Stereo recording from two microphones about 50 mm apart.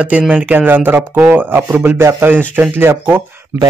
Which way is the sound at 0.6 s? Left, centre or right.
Right.